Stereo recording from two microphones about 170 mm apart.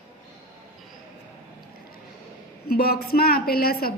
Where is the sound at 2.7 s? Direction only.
65° left (ahead or behind).